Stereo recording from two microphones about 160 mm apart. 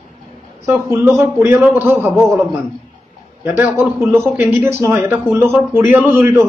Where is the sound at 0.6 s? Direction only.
15° right (ahead or behind).